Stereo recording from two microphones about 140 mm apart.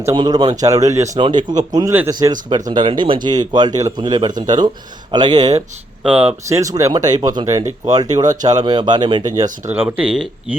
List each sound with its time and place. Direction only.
0.2 s speech: 30° right (ahead or behind)
1.2 s speech: 35° right (ahead or behind)
6.0 s speech: 10° right (ahead or behind)
6.5 s speech: 25° right (ahead or behind)
9.7 s speech: 10° right (ahead or behind)